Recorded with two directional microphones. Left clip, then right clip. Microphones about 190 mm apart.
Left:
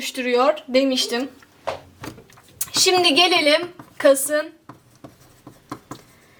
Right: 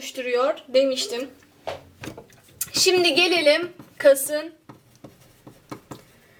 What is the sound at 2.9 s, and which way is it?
Speech, 10° left (ahead or behind).